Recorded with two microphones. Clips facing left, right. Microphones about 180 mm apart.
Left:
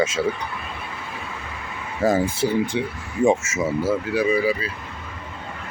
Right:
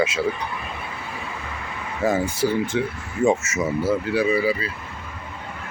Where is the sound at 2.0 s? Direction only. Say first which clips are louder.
Left 1 dB; 30° left (ahead or behind).